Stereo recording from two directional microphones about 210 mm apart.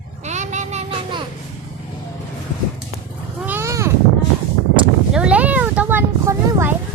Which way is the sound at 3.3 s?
10° right (ahead or behind).